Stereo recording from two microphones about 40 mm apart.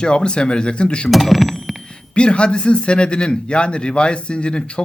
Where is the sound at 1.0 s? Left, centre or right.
Centre.